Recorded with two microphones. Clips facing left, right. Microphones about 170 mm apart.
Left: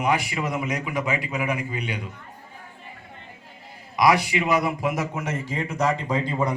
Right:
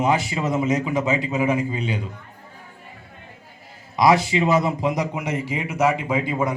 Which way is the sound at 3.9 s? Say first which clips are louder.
Right 3 dB; 25° right (ahead or behind).